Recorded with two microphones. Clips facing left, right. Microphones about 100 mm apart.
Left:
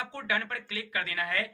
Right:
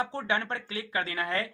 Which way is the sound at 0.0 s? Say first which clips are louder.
Right 3 dB; 30° right (ahead or behind).